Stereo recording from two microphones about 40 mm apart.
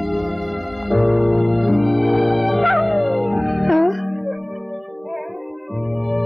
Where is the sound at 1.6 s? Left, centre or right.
Centre.